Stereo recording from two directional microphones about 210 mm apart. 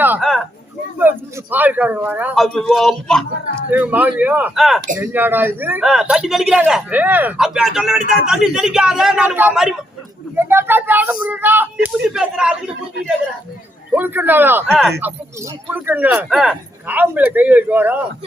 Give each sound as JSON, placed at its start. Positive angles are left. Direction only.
{"t": 0.0, "sound": "a man's voice", "side_deg": -5}
{"t": 13.9, "sound": "a man's voice", "side_deg": -10}